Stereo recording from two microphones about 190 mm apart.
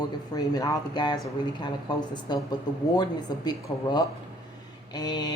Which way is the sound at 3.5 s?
20° left (ahead or behind).